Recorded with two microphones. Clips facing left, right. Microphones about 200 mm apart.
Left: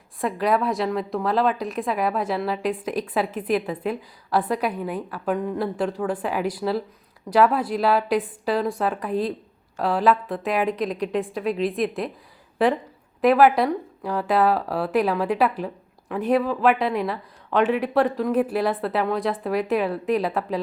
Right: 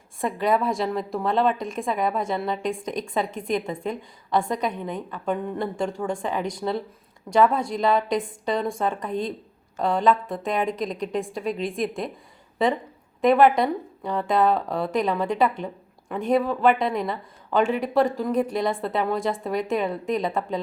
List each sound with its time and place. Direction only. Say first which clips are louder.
0.2 s a woman's voice: left 1 dB; centre (ahead or behind)
13.2 s a woman's voice: left 1 dB; 5° left (ahead or behind)